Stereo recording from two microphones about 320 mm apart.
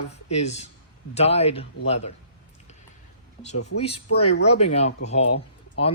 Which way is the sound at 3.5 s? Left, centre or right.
Left.